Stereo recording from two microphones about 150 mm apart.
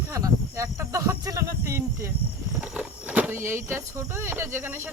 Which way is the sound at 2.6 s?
5° right (ahead or behind).